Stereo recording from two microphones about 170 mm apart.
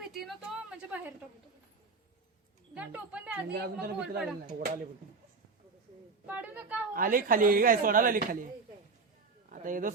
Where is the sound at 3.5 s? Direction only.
75° right (ahead or behind).